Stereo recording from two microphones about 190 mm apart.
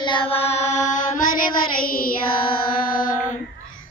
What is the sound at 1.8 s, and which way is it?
Child singing, 50° left (ahead or behind).